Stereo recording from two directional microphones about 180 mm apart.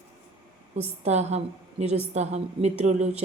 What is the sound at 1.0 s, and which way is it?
Speech, 35° right (ahead or behind).